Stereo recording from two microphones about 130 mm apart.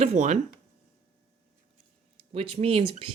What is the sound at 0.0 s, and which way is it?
Speech, 60° right (ahead or behind).